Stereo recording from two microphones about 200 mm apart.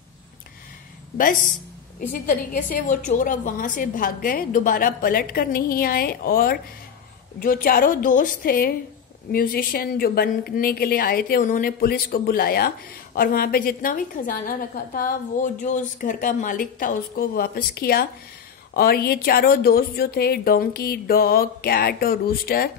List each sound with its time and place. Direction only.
1.1 s a woman's voice: 40° left (ahead or behind)